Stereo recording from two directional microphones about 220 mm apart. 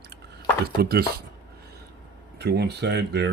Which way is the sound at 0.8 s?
45° right (ahead or behind).